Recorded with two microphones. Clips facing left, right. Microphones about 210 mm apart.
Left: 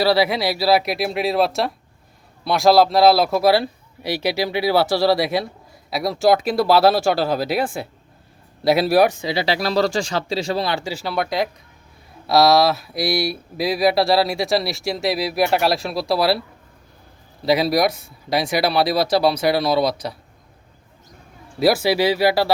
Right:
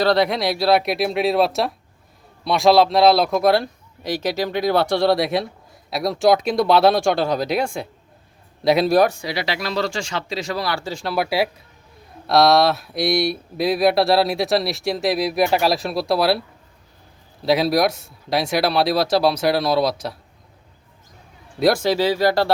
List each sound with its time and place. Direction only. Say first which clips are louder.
0.0 s speech: even; 5° left (ahead or behind)
9.0 s speech: left 3 dB; 20° left (ahead or behind)
10.8 s speech: right 1 dB; 5° left (ahead or behind)
17.4 s speech: even; centre (ahead or behind)
21.6 s speech: left 1 dB; 5° left (ahead or behind)